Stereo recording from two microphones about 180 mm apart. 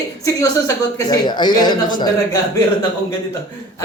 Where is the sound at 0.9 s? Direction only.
20° left (ahead or behind).